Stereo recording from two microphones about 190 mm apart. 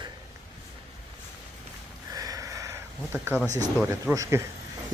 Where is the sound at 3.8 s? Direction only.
15° right (ahead or behind).